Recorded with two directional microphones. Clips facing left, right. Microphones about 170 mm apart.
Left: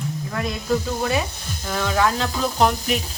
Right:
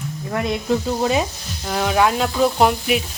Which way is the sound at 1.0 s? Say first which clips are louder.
Right 4 dB; 20° right (ahead or behind).